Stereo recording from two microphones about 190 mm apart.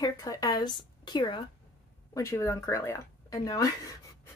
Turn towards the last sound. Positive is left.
turn(degrees=15)  # may be behind; listen again after turning